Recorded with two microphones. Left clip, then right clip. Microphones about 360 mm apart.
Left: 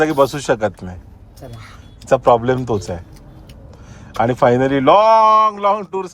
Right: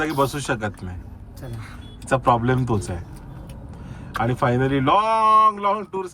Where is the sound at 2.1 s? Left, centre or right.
Centre.